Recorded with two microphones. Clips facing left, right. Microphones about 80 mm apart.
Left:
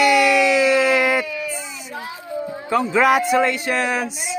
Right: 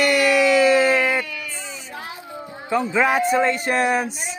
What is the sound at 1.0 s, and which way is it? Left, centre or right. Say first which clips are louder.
Baby cry: left 3 dB; centre.